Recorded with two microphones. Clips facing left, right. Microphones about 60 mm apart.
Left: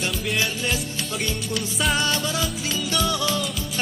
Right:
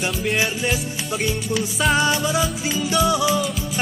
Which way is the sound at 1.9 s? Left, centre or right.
Centre.